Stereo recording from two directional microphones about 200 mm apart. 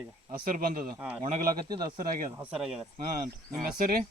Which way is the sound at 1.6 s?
20° right (ahead or behind).